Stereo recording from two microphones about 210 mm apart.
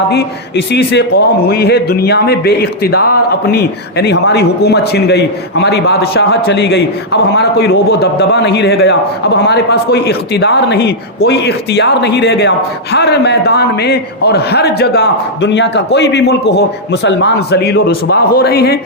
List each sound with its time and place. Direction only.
0.1 s speech: 50° left (ahead or behind)